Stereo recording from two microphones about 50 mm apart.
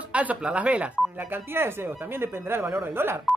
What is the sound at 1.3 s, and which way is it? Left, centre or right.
Speech, right.